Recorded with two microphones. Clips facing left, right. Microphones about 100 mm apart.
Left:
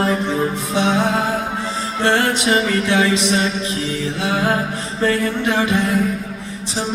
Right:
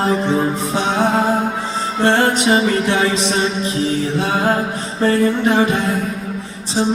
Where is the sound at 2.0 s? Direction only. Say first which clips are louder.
Right 3 dB; 30° right (ahead or behind).